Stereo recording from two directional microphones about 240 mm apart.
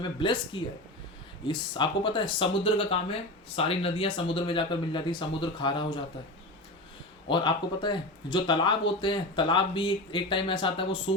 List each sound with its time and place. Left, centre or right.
0.0 s speech: centre
7.3 s speech: centre